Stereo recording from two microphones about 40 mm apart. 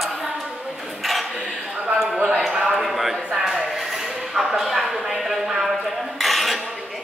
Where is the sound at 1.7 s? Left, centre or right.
Centre.